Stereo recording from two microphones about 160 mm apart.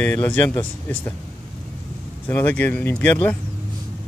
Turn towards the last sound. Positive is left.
turn(degrees=10)  # may be behind; listen again after turning